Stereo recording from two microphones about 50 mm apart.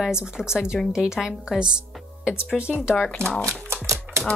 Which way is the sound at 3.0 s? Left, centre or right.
Left.